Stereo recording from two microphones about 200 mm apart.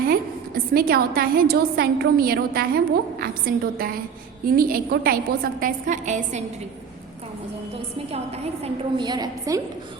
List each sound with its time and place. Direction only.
0.0 s a woman's voice: 45° right (ahead or behind)
8.6 s a woman's voice: 20° right (ahead or behind)